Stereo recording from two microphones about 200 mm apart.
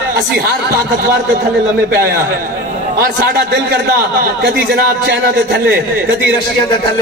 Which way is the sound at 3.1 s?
55° right (ahead or behind).